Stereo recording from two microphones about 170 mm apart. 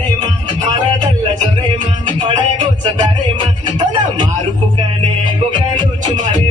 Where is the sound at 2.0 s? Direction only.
25° right (ahead or behind).